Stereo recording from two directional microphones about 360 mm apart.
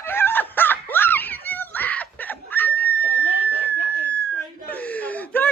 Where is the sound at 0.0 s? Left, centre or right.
Centre.